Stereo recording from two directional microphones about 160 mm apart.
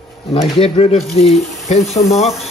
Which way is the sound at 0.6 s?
40° left (ahead or behind).